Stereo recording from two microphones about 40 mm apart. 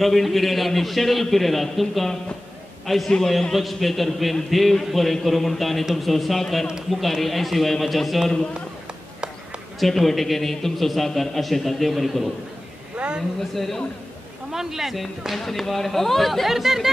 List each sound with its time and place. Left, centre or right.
0.0 s a man's voice: centre
9.8 s a man's voice: centre
12.9 s a sound: right
13.4 s speech: centre
14.5 s speech: centre
15.3 s speech: centre
16.4 s speech: centre